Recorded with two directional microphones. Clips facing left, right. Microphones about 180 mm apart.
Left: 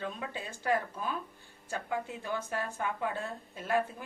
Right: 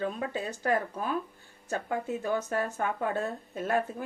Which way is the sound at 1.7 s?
45° right (ahead or behind).